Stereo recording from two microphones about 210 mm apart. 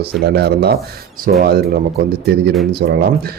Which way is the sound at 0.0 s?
50° right (ahead or behind).